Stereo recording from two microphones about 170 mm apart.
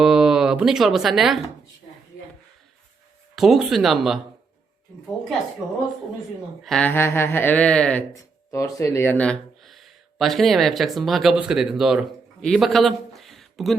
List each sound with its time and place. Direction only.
0.0 s speech: 5° right (ahead or behind)
3.3 s speech: centre (ahead or behind)
6.6 s speech: 5° left (ahead or behind)
8.1 s speech: 20° left (ahead or behind); by 11.9 s 5° right (ahead or behind)
12.4 s a sound: centre (ahead or behind)